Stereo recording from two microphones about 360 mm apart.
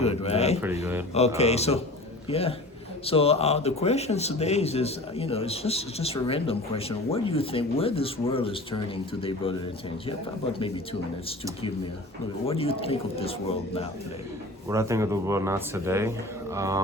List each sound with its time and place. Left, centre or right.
0.0 s a man's voice: centre
12.5 s a man's voice: centre
14.7 s speech: centre